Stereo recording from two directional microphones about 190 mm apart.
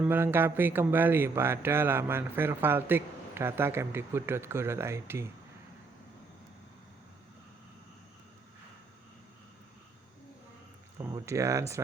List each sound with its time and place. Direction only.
0.0 s speech: 10° right (ahead or behind)
10.9 s speech: 20° right (ahead or behind)